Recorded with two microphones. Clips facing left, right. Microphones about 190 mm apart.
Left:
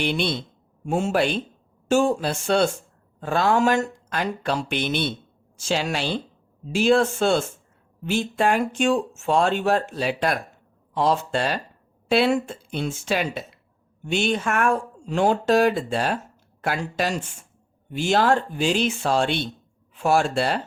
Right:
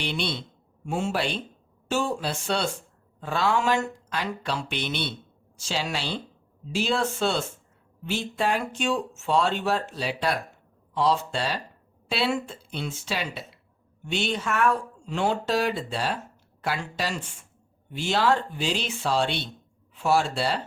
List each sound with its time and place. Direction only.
0.0 s speech: 50° left (ahead or behind)